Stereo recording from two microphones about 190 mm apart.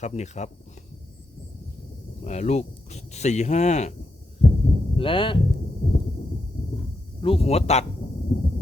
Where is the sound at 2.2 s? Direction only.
35° left (ahead or behind).